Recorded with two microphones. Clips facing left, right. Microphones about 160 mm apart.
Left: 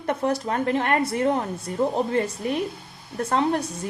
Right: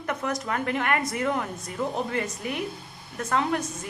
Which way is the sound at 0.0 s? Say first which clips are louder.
Left 5 dB; 30° left (ahead or behind).